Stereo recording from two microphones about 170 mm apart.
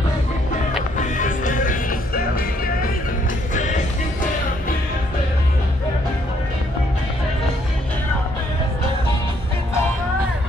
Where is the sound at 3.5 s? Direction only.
45° left (ahead or behind).